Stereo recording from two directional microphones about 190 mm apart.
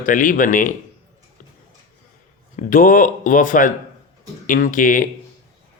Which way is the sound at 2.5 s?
45° left (ahead or behind).